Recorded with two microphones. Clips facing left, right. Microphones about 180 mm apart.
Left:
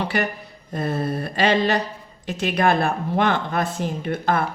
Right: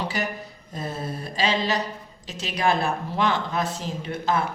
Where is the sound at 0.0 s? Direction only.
60° left (ahead or behind).